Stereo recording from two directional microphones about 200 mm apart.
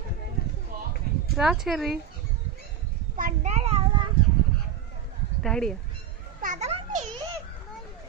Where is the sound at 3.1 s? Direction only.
35° right (ahead or behind).